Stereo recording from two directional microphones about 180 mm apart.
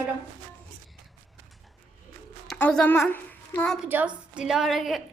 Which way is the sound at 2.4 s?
5° left (ahead or behind).